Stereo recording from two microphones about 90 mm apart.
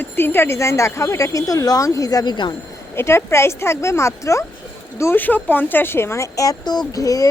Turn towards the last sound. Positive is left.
turn(degrees=40)  # may be behind; listen again after turning